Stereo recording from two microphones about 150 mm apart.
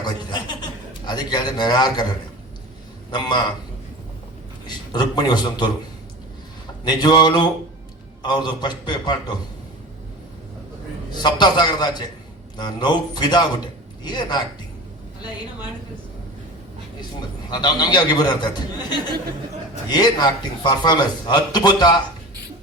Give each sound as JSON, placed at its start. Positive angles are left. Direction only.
{"t": 0.0, "sound": "chuckle", "side_deg": 30}
{"t": 1.0, "sound": "a man's voice", "side_deg": 30}
{"t": 3.1, "sound": "a man's voice", "side_deg": 30}
{"t": 4.6, "sound": "a man's voice", "side_deg": 30}
{"t": 6.8, "sound": "a man's voice", "side_deg": 30}
{"t": 11.2, "sound": "a man's voice", "side_deg": 30}
{"t": 17.5, "sound": "a man's voice", "side_deg": 30}